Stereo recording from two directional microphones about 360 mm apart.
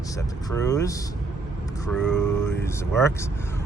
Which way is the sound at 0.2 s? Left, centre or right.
Centre.